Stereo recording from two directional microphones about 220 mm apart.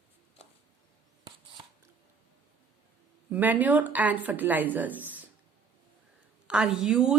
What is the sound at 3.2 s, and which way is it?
Speech, 10° right (ahead or behind).